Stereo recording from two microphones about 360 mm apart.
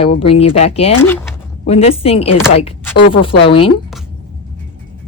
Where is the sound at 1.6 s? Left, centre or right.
Centre.